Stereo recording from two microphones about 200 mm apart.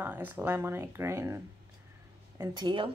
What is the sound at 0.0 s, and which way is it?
Speech, 10° right (ahead or behind).